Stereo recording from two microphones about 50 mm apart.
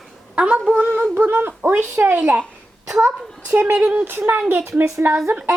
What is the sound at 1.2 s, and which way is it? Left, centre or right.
Speech, right.